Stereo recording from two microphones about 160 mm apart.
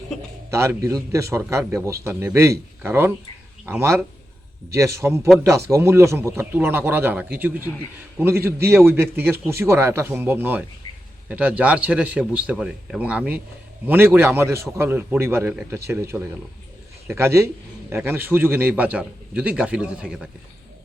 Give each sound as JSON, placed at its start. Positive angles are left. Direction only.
{"t": 0.5, "sound": "a man's voice", "side_deg": -15}